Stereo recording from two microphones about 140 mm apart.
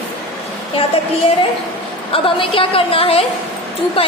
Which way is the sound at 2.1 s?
40° left (ahead or behind).